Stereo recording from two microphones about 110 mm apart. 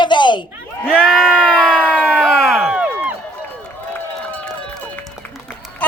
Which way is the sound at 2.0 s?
10° left (ahead or behind).